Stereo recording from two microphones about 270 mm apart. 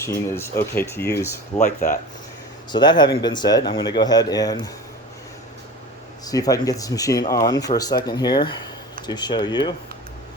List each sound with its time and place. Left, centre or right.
0.0 s speech: centre
2.7 s speech: centre
6.2 s speech: centre